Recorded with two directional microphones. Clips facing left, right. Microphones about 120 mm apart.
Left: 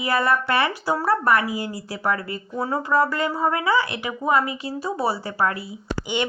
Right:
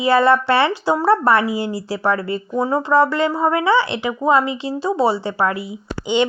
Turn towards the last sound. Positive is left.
turn(degrees=-20)  # may be behind; listen again after turning